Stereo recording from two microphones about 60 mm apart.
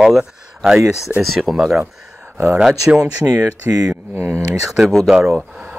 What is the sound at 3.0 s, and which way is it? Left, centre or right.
Speech, right.